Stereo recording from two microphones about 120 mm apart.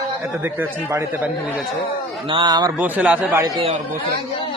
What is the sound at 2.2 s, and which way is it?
Speech, 40° right (ahead or behind).